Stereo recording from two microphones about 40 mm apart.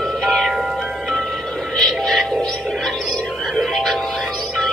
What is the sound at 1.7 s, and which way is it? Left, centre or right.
Music, centre.